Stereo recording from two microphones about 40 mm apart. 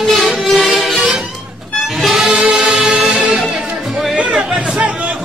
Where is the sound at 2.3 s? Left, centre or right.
Right.